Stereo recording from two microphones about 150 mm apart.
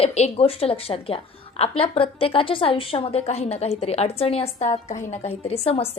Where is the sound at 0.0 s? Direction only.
45° left (ahead or behind).